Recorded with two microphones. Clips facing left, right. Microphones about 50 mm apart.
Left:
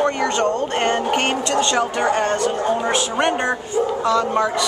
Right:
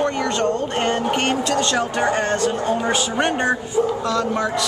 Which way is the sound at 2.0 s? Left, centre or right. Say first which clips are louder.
Right 1 dB; centre.